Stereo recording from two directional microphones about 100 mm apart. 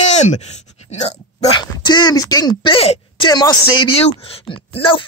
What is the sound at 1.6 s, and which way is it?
Speech, 45° left (ahead or behind).